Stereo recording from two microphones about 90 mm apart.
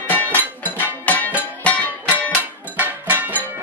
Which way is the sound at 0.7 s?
20° left (ahead or behind).